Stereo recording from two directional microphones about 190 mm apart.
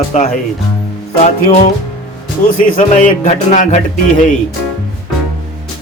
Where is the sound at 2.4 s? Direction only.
45° left (ahead or behind).